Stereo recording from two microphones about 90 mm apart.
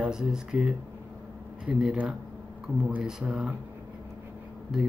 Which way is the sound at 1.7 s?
10° right (ahead or behind).